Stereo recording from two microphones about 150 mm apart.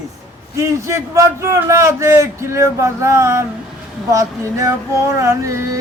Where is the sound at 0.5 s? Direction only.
20° right (ahead or behind).